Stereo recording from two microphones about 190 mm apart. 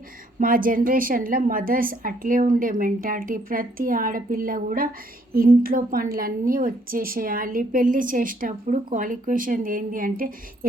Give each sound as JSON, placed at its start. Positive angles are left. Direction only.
{"t": 0.3, "sound": "a woman's voice", "side_deg": -45}